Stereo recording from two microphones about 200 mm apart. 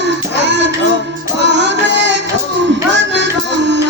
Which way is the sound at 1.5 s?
60° right (ahead or behind).